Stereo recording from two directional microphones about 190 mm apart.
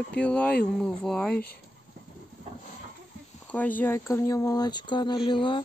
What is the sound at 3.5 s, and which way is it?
Speech, 10° left (ahead or behind).